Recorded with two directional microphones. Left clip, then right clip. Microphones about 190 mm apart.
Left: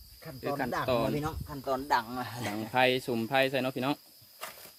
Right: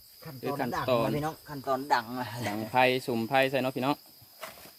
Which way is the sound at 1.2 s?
20° left (ahead or behind).